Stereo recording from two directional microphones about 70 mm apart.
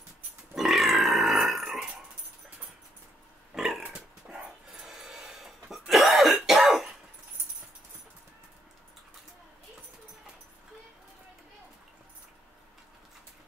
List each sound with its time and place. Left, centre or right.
0.6 s burping: centre
3.5 s a sound: centre
3.8 s dog: centre